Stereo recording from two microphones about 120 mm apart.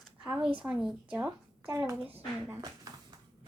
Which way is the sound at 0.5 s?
5° right (ahead or behind).